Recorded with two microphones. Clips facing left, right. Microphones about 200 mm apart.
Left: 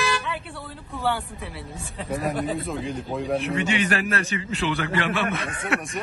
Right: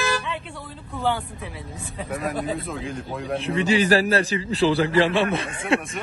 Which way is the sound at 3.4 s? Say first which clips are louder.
Right 6 dB; 30° right (ahead or behind).